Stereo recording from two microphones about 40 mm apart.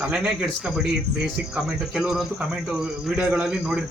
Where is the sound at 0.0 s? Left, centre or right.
Centre.